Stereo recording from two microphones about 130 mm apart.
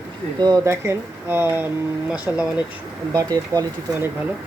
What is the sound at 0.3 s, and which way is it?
Speech, 35° right (ahead or behind).